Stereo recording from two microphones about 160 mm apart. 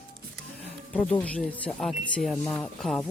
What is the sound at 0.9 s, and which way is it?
Speech, 5° left (ahead or behind).